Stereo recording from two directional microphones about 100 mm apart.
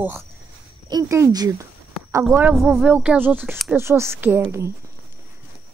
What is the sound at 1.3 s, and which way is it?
Speech, 40° right (ahead or behind).